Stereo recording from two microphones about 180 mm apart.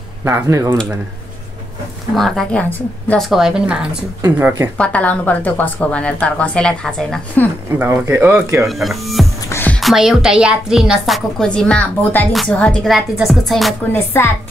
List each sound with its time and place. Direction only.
0.2 s speech: 15° right (ahead or behind)
2.1 s speech: centre (ahead or behind)
4.7 s a woman's voice: 5° left (ahead or behind)
7.8 s speech: 10° right (ahead or behind)
8.6 s speech: centre (ahead or behind)
9.5 s music: 10° left (ahead or behind)
9.8 s speech: centre (ahead or behind)
13.9 s a woman's voice: 15° left (ahead or behind)